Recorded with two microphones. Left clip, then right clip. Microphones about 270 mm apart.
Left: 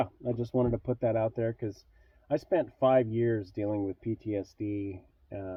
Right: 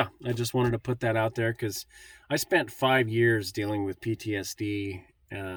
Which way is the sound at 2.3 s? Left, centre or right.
Centre.